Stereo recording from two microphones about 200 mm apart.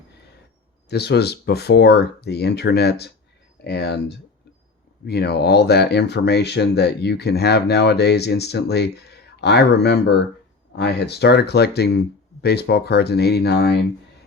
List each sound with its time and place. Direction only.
0.9 s speech: 55° left (ahead or behind)
5.0 s speech: 55° left (ahead or behind)